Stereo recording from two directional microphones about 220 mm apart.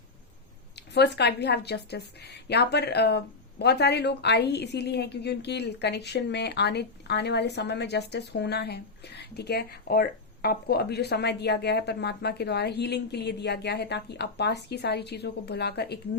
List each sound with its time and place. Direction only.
0.9 s a woman's voice: 50° left (ahead or behind)